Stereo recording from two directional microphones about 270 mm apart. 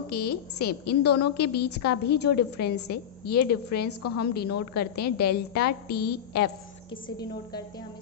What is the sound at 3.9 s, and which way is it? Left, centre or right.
Speech, left.